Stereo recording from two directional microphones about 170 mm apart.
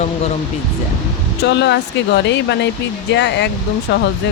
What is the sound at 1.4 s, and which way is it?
Speech, 90° left.